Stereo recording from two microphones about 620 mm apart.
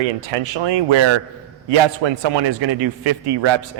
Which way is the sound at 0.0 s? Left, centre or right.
Right.